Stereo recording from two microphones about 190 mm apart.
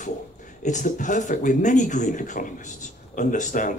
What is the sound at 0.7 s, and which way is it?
Speech, 40° left (ahead or behind).